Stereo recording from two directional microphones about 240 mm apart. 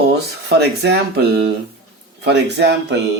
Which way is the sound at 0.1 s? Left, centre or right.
Right.